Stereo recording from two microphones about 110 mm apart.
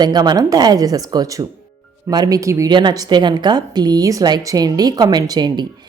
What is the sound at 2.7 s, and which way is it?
Speech, 45° right (ahead or behind).